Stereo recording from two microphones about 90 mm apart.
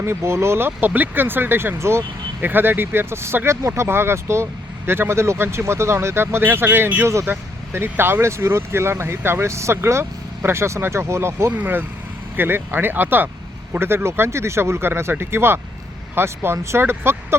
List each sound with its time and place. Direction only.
0.0 s speech: 30° right (ahead or behind)